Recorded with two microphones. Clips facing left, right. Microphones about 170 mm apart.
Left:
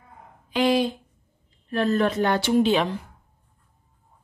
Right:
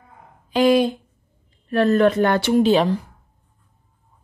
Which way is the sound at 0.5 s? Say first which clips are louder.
Right 5 dB; 45° right (ahead or behind).